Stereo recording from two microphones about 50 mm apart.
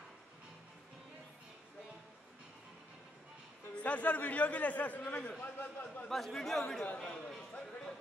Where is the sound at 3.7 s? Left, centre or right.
Left.